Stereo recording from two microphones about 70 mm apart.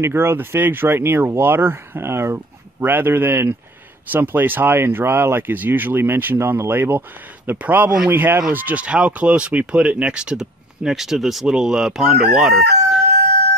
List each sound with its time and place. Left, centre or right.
0.0 s speech: right; by 13.0 s centre